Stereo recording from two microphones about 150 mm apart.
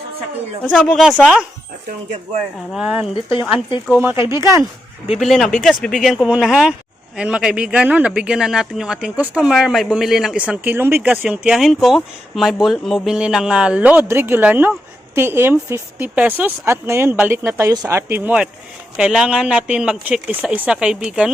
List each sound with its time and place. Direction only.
0.6 s a man's voice: 10° left (ahead or behind)
2.7 s speech: 5° right (ahead or behind)
5.2 s a man's voice: 5° left (ahead or behind)